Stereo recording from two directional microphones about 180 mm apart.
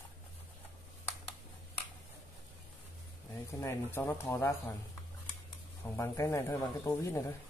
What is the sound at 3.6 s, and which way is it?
Speech, 15° left (ahead or behind).